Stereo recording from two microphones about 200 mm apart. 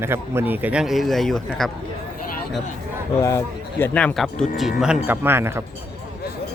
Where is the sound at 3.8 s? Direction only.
5° left (ahead or behind); by 5.6 s 10° right (ahead or behind).